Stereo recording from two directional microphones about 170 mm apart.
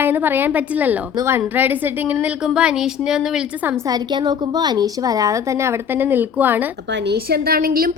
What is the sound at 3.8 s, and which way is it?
A woman's voice, 25° right (ahead or behind).